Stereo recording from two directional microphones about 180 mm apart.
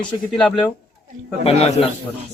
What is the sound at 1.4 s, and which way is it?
Speech, 35° left (ahead or behind).